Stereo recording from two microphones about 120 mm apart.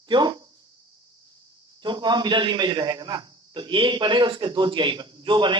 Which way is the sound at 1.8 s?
40° right (ahead or behind).